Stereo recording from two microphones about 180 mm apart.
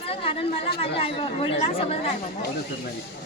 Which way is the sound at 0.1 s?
30° left (ahead or behind).